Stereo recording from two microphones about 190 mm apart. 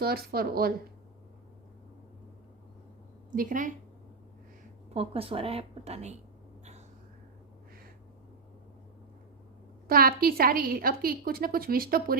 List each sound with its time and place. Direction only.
0.0 s a woman's voice: 50° right (ahead or behind)
3.3 s a woman's voice: 45° right (ahead or behind)
4.9 s a woman's voice: 30° right (ahead or behind)
9.8 s a woman's voice: 50° right (ahead or behind)